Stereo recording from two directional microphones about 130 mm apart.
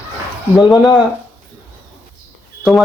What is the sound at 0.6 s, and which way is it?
Speech, 30° left (ahead or behind).